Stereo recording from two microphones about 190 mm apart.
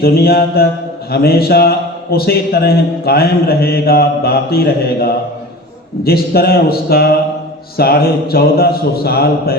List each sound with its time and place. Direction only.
0.0 s a man's voice: 55° left (ahead or behind)